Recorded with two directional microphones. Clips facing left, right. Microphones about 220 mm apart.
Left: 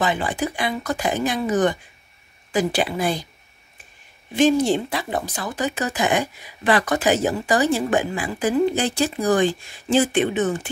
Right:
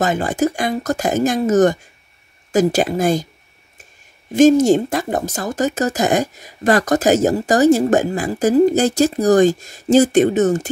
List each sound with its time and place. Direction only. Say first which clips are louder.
0.0 s speech: right 5 dB; 45° right (ahead or behind)
4.3 s speech: right 7 dB; 45° right (ahead or behind)